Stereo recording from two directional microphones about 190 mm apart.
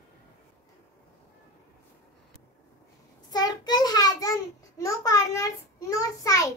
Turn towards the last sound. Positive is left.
turn(degrees=15)  # may be behind; listen again after turning